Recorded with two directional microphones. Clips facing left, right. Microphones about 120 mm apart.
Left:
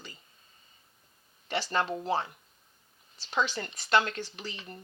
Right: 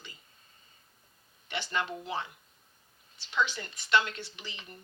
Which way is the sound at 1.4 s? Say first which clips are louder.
Left 4 dB; 35° left (ahead or behind).